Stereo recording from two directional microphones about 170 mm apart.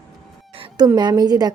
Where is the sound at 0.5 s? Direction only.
25° right (ahead or behind).